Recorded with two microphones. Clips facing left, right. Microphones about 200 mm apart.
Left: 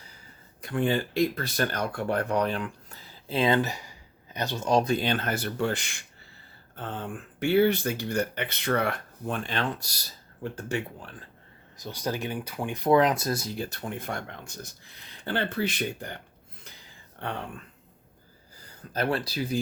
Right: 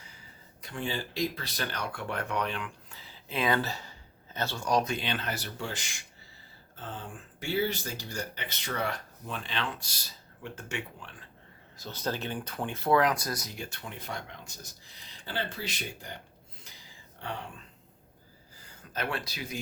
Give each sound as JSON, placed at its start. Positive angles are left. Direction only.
{"t": 0.6, "sound": "speech", "side_deg": 55}
{"t": 11.8, "sound": "speech", "side_deg": 15}
{"t": 13.7, "sound": "speech", "side_deg": 45}
{"t": 18.8, "sound": "speech", "side_deg": 35}